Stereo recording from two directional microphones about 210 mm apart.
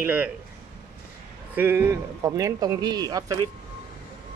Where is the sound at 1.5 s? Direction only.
10° right (ahead or behind).